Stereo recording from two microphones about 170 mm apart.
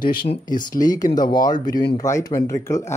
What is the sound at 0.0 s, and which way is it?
Speech, 60° left (ahead or behind).